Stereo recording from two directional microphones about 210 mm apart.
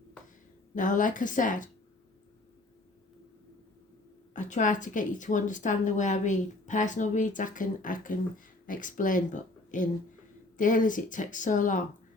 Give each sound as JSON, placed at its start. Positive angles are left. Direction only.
{"t": 0.8, "sound": "a woman's voice", "side_deg": 40}
{"t": 4.4, "sound": "a woman's voice", "side_deg": 35}